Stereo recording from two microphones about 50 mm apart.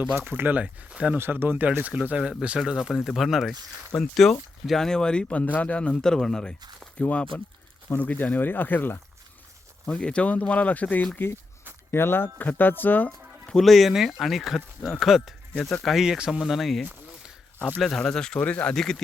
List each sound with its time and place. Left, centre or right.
0.2 s speech: right
0.6 s speech: right
1.1 s speech: right
1.8 s speech: right; by 3.5 s centre
3.9 s a man's voice: centre
5.3 s a man's voice: left; by 6.6 s centre
7.0 s speech: left
9.8 s speech: left
11.9 s speech: left
13.6 s speech: centre
16.4 s a man's voice: centre
18.3 s speech: left
18.7 s a man's voice: centre